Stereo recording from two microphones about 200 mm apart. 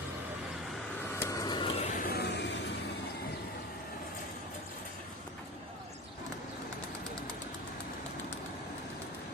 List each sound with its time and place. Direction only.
1.2 s vehicle: 15° left (ahead or behind); by 2.7 s 60° left (ahead or behind)